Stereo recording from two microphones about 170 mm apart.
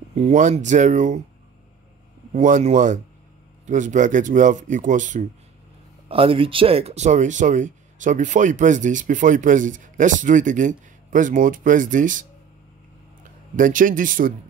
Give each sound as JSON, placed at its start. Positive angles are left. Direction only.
{"t": 0.1, "sound": "speech", "side_deg": -45}
{"t": 2.3, "sound": "speech", "side_deg": -45}
{"t": 6.0, "sound": "speech", "side_deg": -35}
{"t": 13.6, "sound": "speech", "side_deg": -50}